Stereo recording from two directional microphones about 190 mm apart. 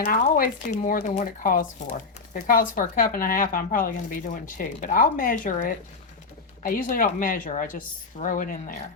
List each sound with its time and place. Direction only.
0.0 s speech: 50° left (ahead or behind)